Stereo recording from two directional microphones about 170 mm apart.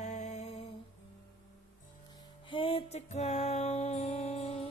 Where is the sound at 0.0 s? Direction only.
40° left (ahead or behind).